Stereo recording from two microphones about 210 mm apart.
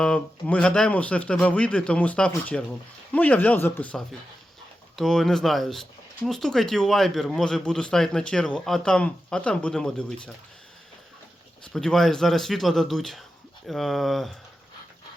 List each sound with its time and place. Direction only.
0.0 s speech: 5° left (ahead or behind)
11.6 s speech: 5° left (ahead or behind)